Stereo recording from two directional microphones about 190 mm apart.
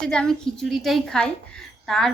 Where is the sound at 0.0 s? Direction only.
5° left (ahead or behind).